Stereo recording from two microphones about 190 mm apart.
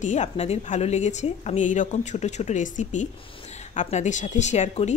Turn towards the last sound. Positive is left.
turn(degrees=35)  # may be behind; listen again after turning